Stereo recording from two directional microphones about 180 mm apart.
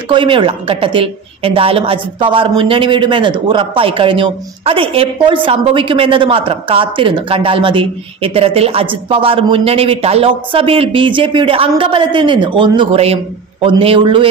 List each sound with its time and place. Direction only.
0.1 s a woman's voice: 25° right (ahead or behind)